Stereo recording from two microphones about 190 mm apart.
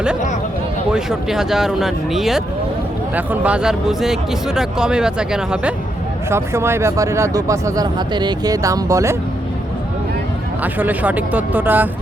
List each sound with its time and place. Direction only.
0.9 s speech: 5° right (ahead or behind)
10.6 s speech: 10° right (ahead or behind)